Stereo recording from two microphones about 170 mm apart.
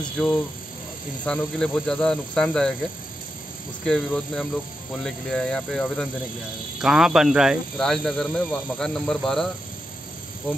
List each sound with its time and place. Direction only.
0.2 s speech: 5° left (ahead or behind)
3.8 s speech: 5° left (ahead or behind)